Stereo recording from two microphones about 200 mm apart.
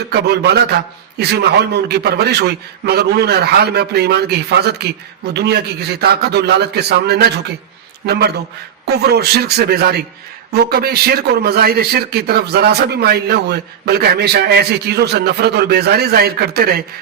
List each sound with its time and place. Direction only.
0.1 s a man's voice: 55° right (ahead or behind)